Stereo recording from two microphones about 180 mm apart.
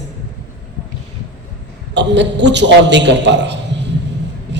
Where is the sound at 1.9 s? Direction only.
80° right.